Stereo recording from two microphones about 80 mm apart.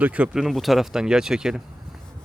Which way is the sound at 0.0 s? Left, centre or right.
Centre.